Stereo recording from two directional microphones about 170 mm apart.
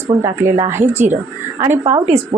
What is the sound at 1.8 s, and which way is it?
Speech, 25° right (ahead or behind).